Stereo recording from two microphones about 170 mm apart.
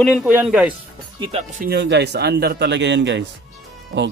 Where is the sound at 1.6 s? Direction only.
75° right (ahead or behind).